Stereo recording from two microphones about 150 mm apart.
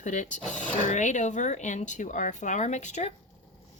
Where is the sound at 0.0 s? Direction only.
55° left (ahead or behind).